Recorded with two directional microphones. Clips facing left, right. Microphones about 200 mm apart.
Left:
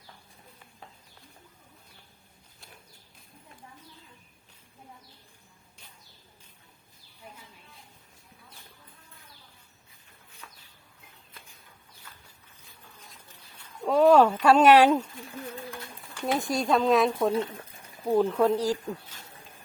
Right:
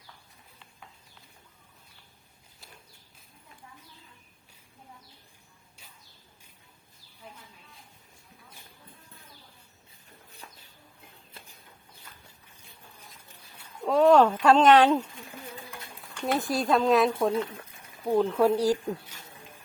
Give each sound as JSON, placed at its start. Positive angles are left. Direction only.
{"t": 10.4, "sound": "a sound", "side_deg": -35}
{"t": 13.6, "sound": "a sound", "side_deg": 0}
{"t": 14.4, "sound": "speech", "side_deg": 10}
{"t": 16.1, "sound": "speech", "side_deg": 0}
{"t": 17.3, "sound": "speech", "side_deg": 30}
{"t": 18.0, "sound": "speech", "side_deg": 0}